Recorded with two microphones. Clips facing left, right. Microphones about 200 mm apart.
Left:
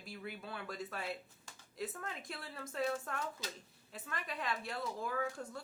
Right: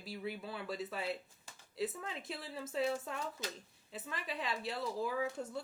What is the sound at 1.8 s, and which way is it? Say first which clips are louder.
Speech: right 3 dB; 5° right (ahead or behind).